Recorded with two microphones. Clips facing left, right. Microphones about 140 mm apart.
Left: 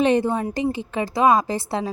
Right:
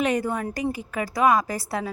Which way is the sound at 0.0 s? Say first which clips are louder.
Left 5 dB; 25° left (ahead or behind).